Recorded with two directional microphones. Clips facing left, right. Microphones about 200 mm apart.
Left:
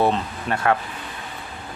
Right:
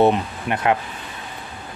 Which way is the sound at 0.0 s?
15° right (ahead or behind).